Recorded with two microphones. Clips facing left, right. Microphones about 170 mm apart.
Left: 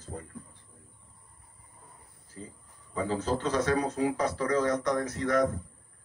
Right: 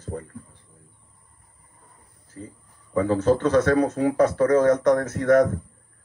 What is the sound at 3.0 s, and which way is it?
A man's voice, 60° right (ahead or behind).